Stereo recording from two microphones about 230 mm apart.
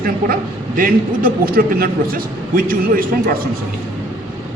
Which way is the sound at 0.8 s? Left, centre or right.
Right.